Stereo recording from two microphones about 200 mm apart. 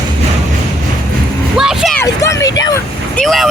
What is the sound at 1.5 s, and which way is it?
Vehicle, centre (ahead or behind).